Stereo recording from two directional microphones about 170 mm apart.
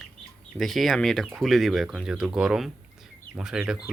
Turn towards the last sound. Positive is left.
turn(degrees=-5)  # may be behind; listen again after turning